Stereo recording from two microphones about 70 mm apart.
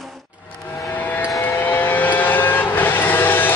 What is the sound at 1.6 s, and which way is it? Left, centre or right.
Vehicle, left.